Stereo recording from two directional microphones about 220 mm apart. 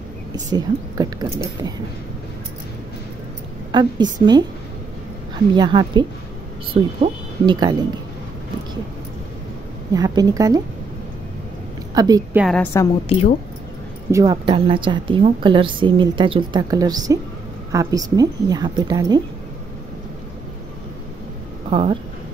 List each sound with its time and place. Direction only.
0.5 s a woman's voice: 15° right (ahead or behind)
3.7 s a woman's voice: 20° right (ahead or behind)
5.5 s a woman's voice: 20° right (ahead or behind)
9.9 s a woman's voice: 15° right (ahead or behind)
11.9 s speech: 15° right (ahead or behind)
12.4 s a woman's voice: centre (ahead or behind)
14.1 s a woman's voice: 20° right (ahead or behind)
21.6 s speech: 25° right (ahead or behind)